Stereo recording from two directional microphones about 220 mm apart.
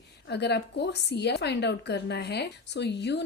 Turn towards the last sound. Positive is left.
turn(degrees=50)  # may be behind; listen again after turning